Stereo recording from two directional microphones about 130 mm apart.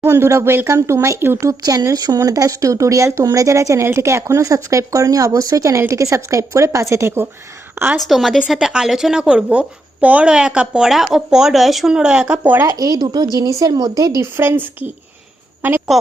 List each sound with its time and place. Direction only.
0.0 s speech: 20° right (ahead or behind)
7.9 s speech: centre (ahead or behind); by 12.7 s 15° right (ahead or behind)
12.7 s speech: 30° right (ahead or behind)